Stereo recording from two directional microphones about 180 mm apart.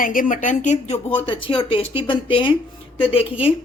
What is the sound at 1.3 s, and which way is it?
Speech, 30° left (ahead or behind).